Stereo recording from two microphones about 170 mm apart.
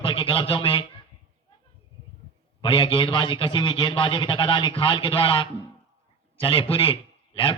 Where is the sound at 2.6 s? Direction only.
30° left (ahead or behind).